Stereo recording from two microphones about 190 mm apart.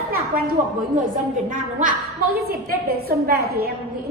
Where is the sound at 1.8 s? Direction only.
45° right (ahead or behind).